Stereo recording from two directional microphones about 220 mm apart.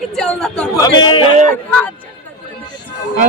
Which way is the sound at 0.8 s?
20° left (ahead or behind).